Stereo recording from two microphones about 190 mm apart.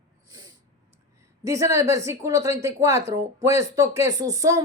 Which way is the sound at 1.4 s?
15° right (ahead or behind).